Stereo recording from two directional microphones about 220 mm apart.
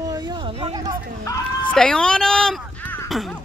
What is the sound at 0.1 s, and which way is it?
Hubbub, 20° right (ahead or behind).